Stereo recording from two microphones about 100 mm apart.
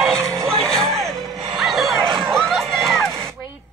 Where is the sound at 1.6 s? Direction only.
Centre (ahead or behind).